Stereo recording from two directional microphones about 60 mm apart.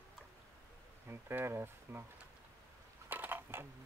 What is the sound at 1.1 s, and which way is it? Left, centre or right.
Speech, right.